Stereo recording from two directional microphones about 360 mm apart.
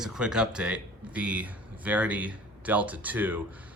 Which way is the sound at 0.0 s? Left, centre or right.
Centre.